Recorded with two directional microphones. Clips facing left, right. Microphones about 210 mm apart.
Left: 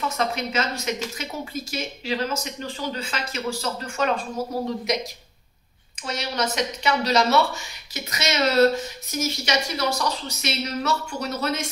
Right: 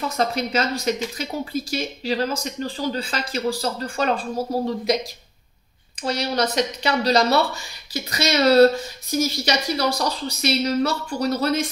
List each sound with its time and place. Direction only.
0.2 s speech: 35° right (ahead or behind)
6.0 s speech: 35° right (ahead or behind)